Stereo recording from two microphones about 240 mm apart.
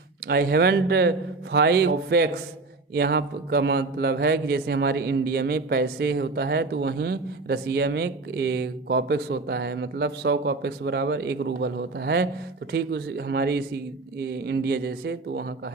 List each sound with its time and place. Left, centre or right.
0.3 s a man's voice: right